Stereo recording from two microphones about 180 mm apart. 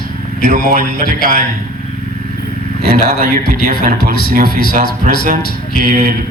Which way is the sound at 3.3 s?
60° left (ahead or behind).